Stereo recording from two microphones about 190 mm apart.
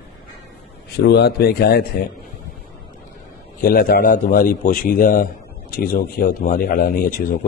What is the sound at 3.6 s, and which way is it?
Speech, 50° left (ahead or behind).